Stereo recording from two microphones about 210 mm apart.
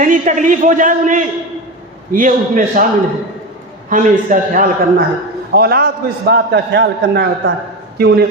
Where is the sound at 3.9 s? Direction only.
35° right (ahead or behind).